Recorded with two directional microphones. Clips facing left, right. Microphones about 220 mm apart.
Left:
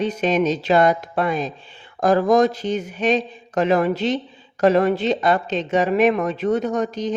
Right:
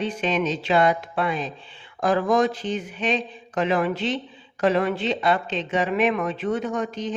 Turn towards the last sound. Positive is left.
turn(degrees=40)  # may be behind; listen again after turning